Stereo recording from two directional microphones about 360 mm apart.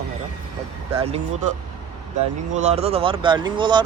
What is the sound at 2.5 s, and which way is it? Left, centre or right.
Speech, centre.